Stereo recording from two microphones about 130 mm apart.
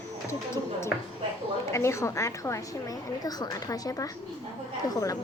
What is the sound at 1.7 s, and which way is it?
A woman's voice, 20° left (ahead or behind).